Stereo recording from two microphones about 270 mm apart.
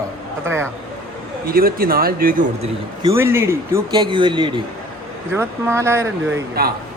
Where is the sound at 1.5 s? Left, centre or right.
Right.